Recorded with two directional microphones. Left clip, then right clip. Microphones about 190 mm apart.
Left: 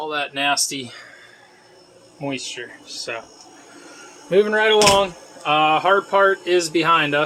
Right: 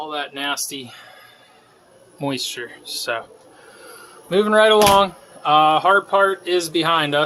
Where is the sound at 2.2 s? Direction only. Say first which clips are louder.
Right 3 dB; 25° right (ahead or behind).